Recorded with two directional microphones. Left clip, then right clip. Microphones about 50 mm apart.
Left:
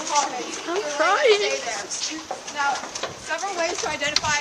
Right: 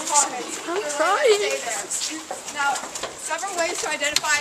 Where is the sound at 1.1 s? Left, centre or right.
Right.